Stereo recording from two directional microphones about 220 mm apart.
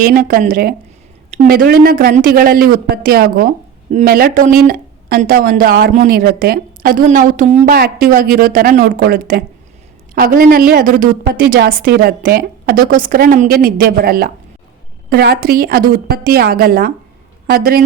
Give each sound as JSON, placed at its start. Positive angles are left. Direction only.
{"t": 0.0, "sound": "a woman's voice", "side_deg": -40}